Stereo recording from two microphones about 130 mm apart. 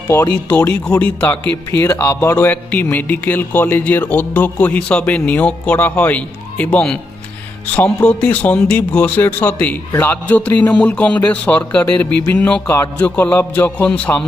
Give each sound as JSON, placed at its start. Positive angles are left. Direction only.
{"t": 0.7, "sound": "a man's voice", "side_deg": 10}